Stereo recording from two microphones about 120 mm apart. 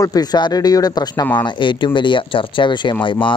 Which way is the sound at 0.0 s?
35° left (ahead or behind).